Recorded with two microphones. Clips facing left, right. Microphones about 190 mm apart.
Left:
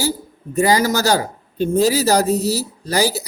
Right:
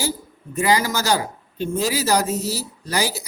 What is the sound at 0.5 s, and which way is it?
Speech, 35° left (ahead or behind).